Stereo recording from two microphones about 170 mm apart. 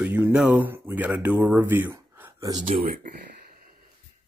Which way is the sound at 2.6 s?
55° right (ahead or behind).